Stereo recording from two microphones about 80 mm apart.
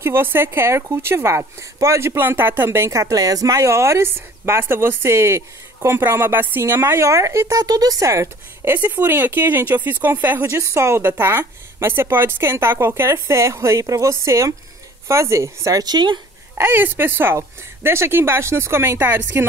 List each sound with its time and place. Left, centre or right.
0.0 s speech: right
8.6 s speech: right
10.6 s speech: right
15.8 s speech: right
16.5 s speech: right